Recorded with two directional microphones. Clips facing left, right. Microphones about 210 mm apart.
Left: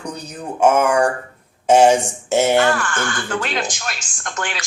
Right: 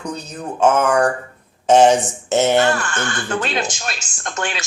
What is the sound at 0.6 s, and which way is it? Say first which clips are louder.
Speech: even; 10° left (ahead or behind).